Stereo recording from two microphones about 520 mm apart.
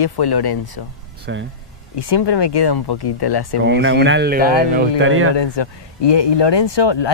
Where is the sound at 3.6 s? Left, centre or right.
Right.